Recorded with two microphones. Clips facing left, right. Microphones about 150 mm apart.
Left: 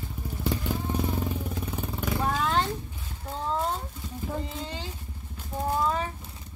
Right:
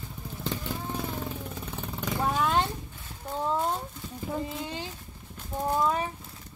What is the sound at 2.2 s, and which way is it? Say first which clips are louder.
Roaring cats: right 1 dB; 15° right (ahead or behind).